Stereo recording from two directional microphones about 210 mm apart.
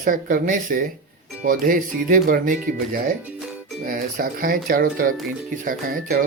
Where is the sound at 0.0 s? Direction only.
40° right (ahead or behind).